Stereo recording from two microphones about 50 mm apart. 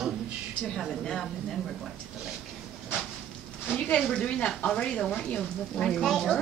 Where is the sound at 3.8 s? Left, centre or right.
Centre.